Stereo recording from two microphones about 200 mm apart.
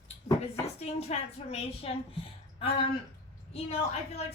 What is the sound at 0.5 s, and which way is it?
A woman's voice, 30° left (ahead or behind).